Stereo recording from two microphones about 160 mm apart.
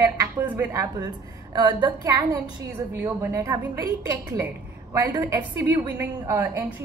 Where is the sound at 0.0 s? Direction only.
15° right (ahead or behind).